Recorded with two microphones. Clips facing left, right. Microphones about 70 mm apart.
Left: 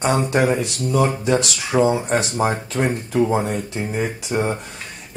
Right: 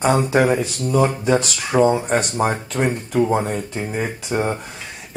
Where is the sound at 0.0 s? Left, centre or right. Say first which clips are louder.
Right 2 dB; centre.